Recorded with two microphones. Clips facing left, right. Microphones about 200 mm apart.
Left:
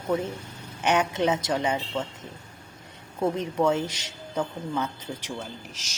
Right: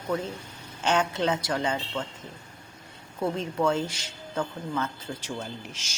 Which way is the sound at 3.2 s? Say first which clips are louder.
Left 2 dB; 20° left (ahead or behind).